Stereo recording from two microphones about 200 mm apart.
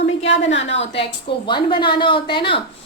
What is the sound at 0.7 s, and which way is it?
A woman's voice, 30° left (ahead or behind).